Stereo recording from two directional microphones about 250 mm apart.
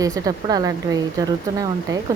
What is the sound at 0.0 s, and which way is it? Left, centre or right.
Speech, centre.